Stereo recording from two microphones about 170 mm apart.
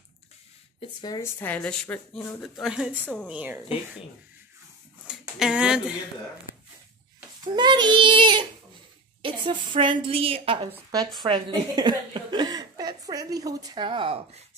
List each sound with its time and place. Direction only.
0.7 s speech: 25° left (ahead or behind)
1.4 s speech: 10° left (ahead or behind)
2.5 s speech: centre (ahead or behind)
5.4 s speech: 5° right (ahead or behind)
7.5 s speech: 25° right (ahead or behind)
10.7 s speech: 20° right (ahead or behind)